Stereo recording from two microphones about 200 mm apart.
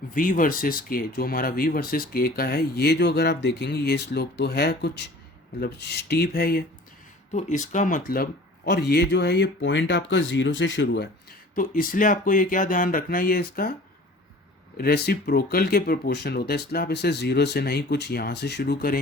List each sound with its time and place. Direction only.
0.1 s speech: 40° left (ahead or behind)
7.3 s speech: 40° left (ahead or behind)
14.8 s speech: 50° left (ahead or behind)